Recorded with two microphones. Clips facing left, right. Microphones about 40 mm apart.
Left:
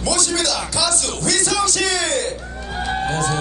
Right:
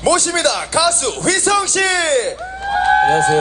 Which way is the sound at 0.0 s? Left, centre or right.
Right.